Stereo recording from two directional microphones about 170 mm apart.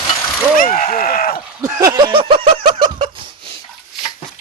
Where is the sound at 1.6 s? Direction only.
20° right (ahead or behind).